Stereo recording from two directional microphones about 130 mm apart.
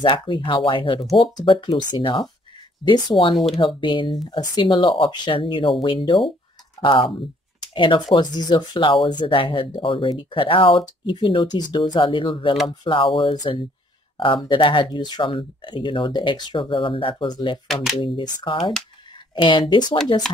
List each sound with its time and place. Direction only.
0.3 s speech: 35° left (ahead or behind)